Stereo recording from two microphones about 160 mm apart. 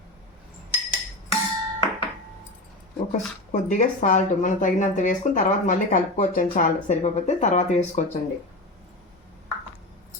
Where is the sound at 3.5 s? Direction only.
50° left (ahead or behind).